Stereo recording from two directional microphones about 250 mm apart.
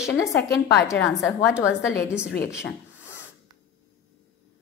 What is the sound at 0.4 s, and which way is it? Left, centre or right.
Speech, left.